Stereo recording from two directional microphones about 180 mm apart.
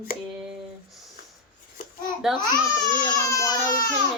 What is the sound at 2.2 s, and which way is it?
Speech, centre (ahead or behind).